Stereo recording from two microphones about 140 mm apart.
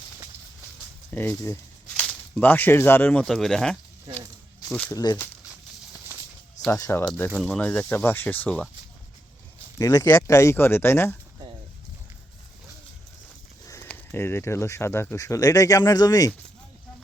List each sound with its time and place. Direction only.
1.1 s speech: 15° left (ahead or behind)
4.9 s speech: 25° left (ahead or behind)
6.7 s speech: 20° left (ahead or behind)
7.3 s speech: centre (ahead or behind)
7.6 s speech: 10° left (ahead or behind)
9.7 s speech: 25° left (ahead or behind)
13.8 s speech: 15° left (ahead or behind)